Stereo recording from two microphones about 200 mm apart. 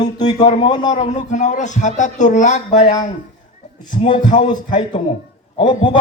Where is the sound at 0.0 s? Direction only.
20° left (ahead or behind).